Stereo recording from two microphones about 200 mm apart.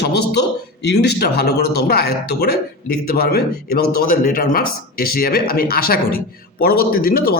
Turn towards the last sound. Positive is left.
turn(degrees=45)  # may be behind; listen again after turning